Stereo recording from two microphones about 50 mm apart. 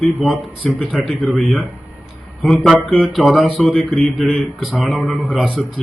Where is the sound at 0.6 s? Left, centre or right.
Centre.